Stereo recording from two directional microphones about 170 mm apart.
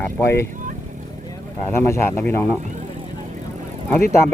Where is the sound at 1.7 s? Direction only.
15° left (ahead or behind).